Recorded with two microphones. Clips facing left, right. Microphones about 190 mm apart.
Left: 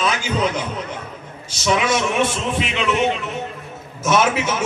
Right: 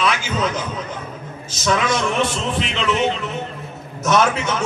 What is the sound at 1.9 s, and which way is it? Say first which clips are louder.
A man's voice: left 1 dB; 5° left (ahead or behind).